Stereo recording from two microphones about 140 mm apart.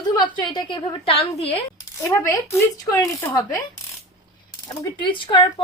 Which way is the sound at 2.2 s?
20° left (ahead or behind).